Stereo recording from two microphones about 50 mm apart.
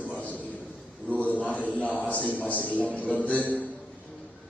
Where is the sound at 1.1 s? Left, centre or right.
Left.